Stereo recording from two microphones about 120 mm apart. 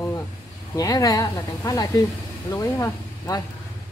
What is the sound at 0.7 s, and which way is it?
A woman's voice, 30° left (ahead or behind).